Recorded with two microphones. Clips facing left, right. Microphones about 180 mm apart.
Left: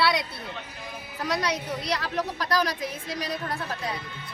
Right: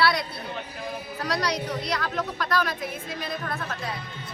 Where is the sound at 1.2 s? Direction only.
20° left (ahead or behind).